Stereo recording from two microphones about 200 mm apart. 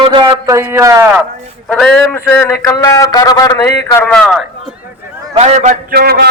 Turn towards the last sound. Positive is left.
turn(degrees=-50)  # may be behind; listen again after turning